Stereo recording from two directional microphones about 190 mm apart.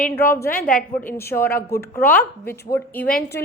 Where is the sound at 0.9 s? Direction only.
10° left (ahead or behind).